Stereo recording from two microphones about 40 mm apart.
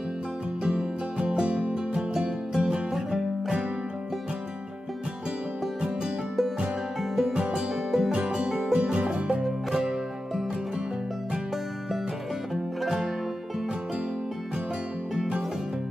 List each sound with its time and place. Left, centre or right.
0.7 s music: centre
7.0 s music: centre
7.3 s music: right
7.7 s music: centre
8.1 s music: right